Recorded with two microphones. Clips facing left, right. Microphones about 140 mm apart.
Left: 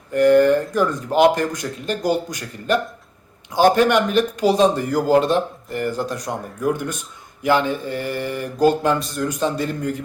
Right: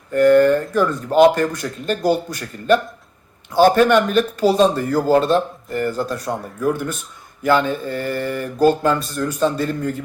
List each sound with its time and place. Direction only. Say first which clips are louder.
0.1 s speech: right 1 dB; 15° left (ahead or behind)